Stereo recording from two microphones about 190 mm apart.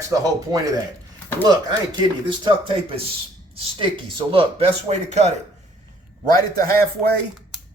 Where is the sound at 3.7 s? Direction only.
25° right (ahead or behind).